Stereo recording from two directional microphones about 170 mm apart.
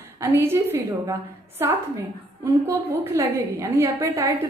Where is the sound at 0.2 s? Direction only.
15° right (ahead or behind).